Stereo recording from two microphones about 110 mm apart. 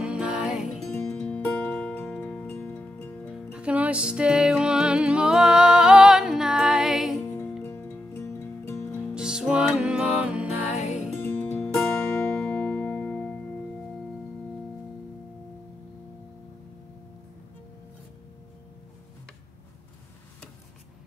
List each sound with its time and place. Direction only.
0.0 s music: 10° right (ahead or behind)
1.0 s music: 10° left (ahead or behind)
3.5 s music: 10° right (ahead or behind)
7.6 s music: 15° left (ahead or behind)
9.1 s music: 5° right (ahead or behind)
11.2 s music: 15° left (ahead or behind)